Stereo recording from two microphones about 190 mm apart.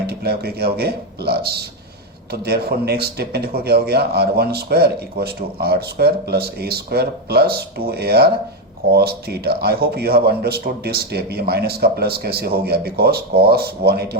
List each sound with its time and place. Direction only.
0.1 s a man's voice: 55° right (ahead or behind)